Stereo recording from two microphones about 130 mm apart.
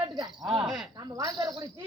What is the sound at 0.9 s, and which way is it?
Speech, 30° right (ahead or behind).